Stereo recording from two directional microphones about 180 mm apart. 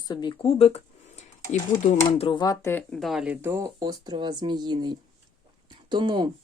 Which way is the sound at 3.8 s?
20° right (ahead or behind).